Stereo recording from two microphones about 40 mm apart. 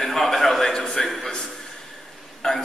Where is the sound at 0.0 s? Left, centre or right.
Centre.